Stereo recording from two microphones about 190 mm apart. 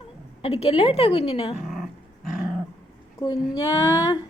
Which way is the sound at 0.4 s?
30° left (ahead or behind).